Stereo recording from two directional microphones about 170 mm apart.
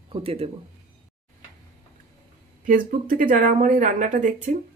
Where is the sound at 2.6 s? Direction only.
55° right (ahead or behind).